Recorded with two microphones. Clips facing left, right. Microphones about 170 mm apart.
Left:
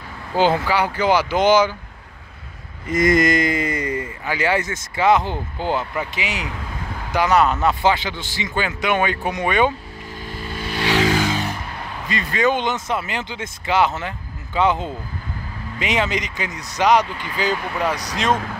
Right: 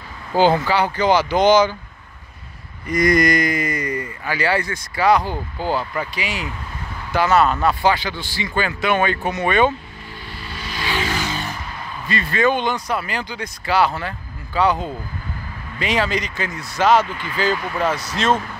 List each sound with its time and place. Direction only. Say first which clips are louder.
0.4 s speech: right 2 dB; 5° left (ahead or behind)
2.9 s speech: even; 25° left (ahead or behind)
10.3 s vehicle: left 5 dB; 50° left (ahead or behind); by 11.1 s 75° left (ahead or behind)
12.1 s speech: right 1 dB; 15° left (ahead or behind)